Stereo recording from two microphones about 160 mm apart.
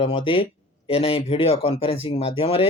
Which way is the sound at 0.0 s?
35° left (ahead or behind).